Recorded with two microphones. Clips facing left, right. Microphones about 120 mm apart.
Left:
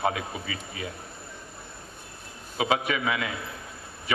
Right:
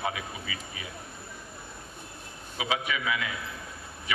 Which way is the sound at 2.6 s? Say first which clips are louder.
Left 5 dB; 40° left (ahead or behind).